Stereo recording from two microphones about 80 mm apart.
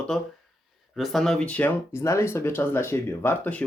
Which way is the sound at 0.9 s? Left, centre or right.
Centre.